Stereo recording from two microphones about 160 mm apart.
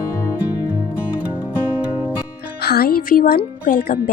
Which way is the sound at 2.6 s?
75° left (ahead or behind).